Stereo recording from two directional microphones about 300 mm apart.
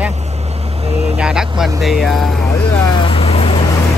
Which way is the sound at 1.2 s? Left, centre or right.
Centre.